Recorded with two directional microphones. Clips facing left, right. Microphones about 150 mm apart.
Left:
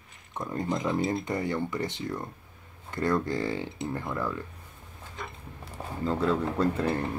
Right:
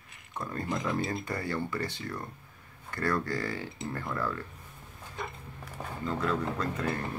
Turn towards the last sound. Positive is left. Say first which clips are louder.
# left 6 dB
turn(degrees=30)  # may be behind; listen again after turning